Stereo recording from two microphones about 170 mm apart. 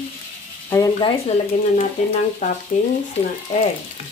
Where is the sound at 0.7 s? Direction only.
20° left (ahead or behind).